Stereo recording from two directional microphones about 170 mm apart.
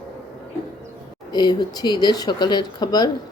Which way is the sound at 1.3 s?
25° left (ahead or behind).